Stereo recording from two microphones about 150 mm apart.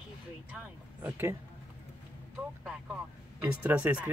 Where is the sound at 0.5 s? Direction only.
10° right (ahead or behind).